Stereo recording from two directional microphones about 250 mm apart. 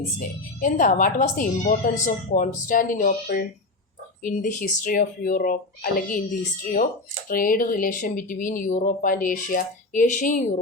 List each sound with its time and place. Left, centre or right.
0.2 s a woman's voice: left
7.3 s a woman's voice: left